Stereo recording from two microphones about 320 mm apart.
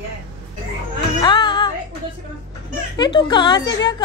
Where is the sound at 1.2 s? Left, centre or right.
Centre.